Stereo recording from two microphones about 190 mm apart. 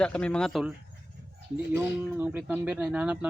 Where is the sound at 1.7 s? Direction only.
10° right (ahead or behind).